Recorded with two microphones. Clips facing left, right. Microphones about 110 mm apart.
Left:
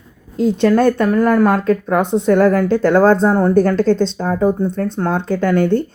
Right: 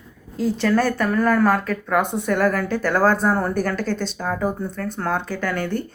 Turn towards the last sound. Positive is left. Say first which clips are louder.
# left 8 dB
turn(degrees=20)  # may be behind; listen again after turning